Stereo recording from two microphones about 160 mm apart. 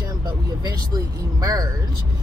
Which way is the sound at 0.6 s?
20° right (ahead or behind).